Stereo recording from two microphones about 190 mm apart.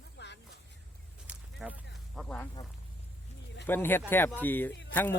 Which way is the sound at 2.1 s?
5° left (ahead or behind).